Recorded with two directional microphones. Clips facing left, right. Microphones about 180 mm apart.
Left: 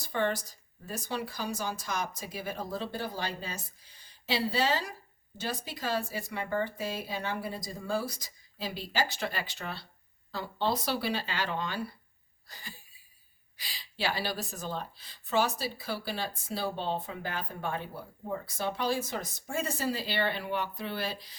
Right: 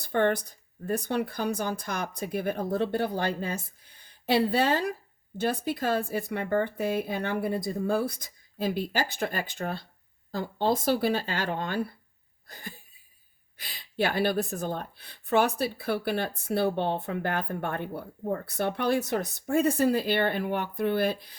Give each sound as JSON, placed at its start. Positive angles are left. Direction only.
{"t": 0.0, "sound": "speech", "side_deg": -55}
{"t": 12.5, "sound": "a sound", "side_deg": -55}
{"t": 13.6, "sound": "speech", "side_deg": -55}